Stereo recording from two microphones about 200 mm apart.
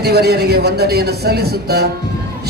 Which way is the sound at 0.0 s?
55° right (ahead or behind).